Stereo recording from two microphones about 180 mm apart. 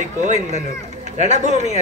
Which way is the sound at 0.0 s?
40° right (ahead or behind).